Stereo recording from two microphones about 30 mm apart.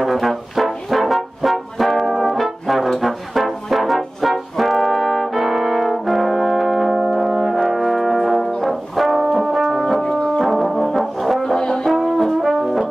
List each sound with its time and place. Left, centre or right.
0.0 s brass instrument: centre
5.4 s brass instrument: centre
8.5 s music: centre
9.8 s music: centre
10.4 s brass instrument: centre
11.4 s brass instrument: centre
11.9 s brass instrument: centre
12.4 s brass instrument: centre